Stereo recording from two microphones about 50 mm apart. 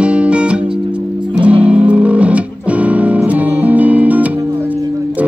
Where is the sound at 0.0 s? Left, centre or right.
Right.